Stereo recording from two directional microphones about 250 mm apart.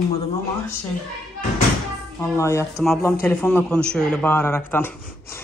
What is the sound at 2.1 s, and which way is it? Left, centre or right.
A man's voice, centre.